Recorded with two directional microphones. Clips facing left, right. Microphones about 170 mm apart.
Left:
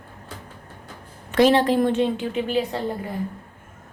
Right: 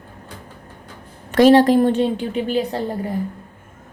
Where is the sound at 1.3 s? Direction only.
45° right (ahead or behind).